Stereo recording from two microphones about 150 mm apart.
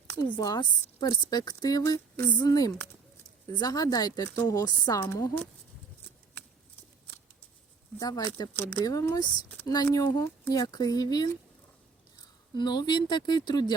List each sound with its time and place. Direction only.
0.1 s a sound: 15° left (ahead or behind)
0.3 s a woman's voice: 30° left (ahead or behind)
7.9 s a woman's voice: 25° left (ahead or behind)
12.5 s a woman's voice: 30° left (ahead or behind)